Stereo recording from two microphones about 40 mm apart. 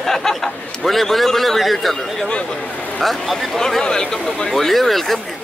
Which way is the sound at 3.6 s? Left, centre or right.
Centre.